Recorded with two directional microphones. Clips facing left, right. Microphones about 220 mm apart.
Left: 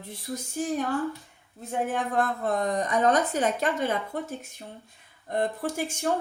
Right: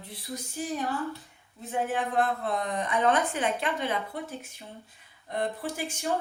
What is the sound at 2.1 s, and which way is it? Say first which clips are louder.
Speech: left 2 dB; 45° left (ahead or behind).